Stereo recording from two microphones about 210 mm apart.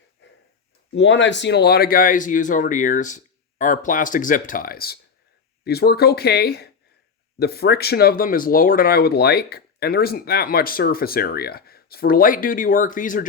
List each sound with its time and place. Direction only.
0.9 s speech: 60° left (ahead or behind); by 13.2 s 40° left (ahead or behind)